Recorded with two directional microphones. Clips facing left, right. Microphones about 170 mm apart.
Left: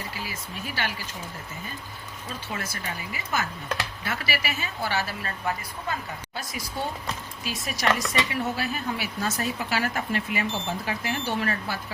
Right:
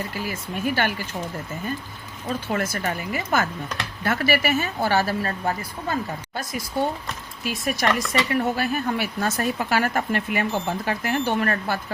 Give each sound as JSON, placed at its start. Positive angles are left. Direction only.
{"t": 0.3, "sound": "speech", "side_deg": -55}
{"t": 2.5, "sound": "speech", "side_deg": -55}
{"t": 6.8, "sound": "speech", "side_deg": -60}